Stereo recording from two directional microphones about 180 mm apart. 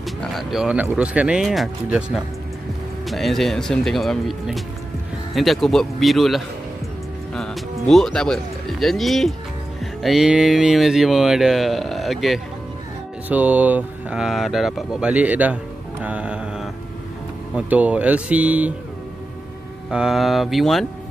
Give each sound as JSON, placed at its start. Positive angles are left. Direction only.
{"t": 0.0, "sound": "speech", "side_deg": 0}
{"t": 19.9, "sound": "speech", "side_deg": -5}